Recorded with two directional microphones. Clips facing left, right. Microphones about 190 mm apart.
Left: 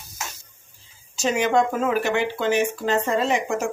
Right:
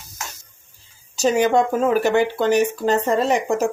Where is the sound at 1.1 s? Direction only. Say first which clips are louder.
Right 4 dB; 35° right (ahead or behind).